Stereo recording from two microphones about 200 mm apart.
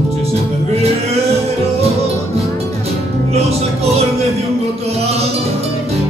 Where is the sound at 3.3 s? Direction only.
30° right (ahead or behind).